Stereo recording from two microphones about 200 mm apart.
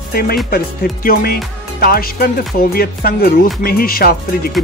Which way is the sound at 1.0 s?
50° left (ahead or behind).